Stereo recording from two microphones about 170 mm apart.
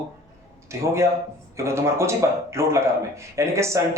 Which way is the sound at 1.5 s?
15° right (ahead or behind).